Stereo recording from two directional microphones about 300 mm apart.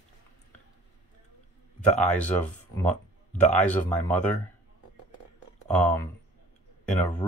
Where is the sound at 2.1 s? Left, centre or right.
Centre.